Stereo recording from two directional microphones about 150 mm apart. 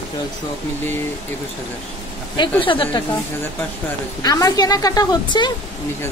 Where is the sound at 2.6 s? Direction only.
35° left (ahead or behind).